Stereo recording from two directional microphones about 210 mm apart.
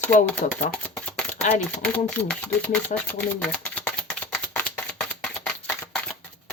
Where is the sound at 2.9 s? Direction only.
40° left (ahead or behind).